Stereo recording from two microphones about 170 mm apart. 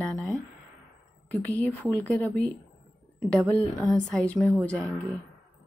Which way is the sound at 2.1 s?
10° left (ahead or behind).